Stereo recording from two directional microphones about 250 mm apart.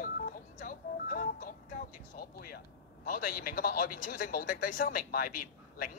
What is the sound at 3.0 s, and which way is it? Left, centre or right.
Speech, left.